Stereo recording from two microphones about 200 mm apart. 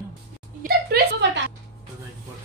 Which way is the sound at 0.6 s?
50° right (ahead or behind).